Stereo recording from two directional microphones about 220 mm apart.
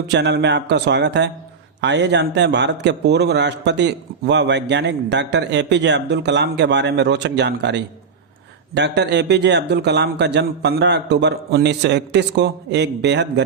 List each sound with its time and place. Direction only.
0.1 s a man's voice: 50° right (ahead or behind)